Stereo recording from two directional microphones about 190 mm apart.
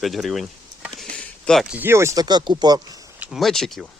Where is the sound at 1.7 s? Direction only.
10° right (ahead or behind).